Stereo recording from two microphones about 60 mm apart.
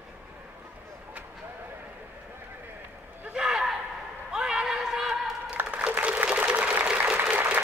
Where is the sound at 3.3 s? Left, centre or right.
Centre.